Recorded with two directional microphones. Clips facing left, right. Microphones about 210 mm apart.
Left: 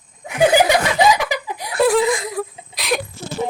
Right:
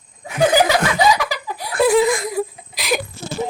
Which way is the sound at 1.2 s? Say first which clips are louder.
Left 1 dB; 20° left (ahead or behind).